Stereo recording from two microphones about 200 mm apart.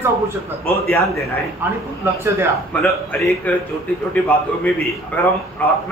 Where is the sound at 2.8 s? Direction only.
10° left (ahead or behind).